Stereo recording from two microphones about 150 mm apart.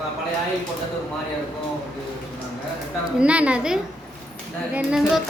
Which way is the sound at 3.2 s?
10° right (ahead or behind).